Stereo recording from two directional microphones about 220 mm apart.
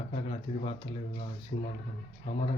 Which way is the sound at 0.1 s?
25° left (ahead or behind).